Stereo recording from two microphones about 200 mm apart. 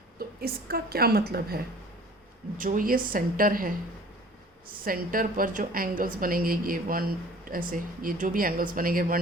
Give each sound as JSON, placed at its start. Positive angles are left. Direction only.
{"t": 0.2, "sound": "speech", "side_deg": -50}
{"t": 4.9, "sound": "speech", "side_deg": -45}